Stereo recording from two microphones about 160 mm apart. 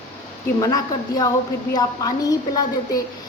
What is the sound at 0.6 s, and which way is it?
A woman's voice, 20° left (ahead or behind).